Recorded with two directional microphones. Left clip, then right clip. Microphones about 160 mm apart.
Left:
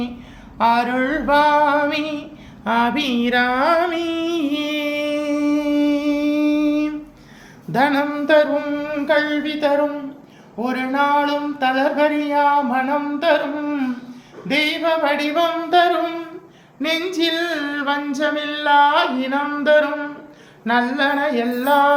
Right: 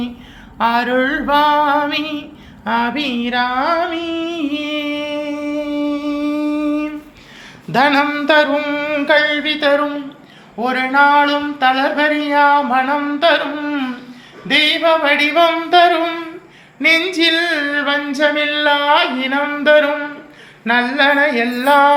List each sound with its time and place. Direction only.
0.6 s speech: centre (ahead or behind)
2.6 s a sound: 15° left (ahead or behind)
6.1 s a sound: 10° left (ahead or behind)
7.7 s speech: 5° left (ahead or behind)
8.3 s singing: 10° right (ahead or behind)
10.6 s speech: 10° right (ahead or behind)
14.4 s singing: 10° right (ahead or behind)